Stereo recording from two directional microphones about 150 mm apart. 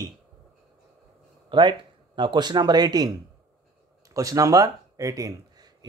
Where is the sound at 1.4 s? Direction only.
30° right (ahead or behind).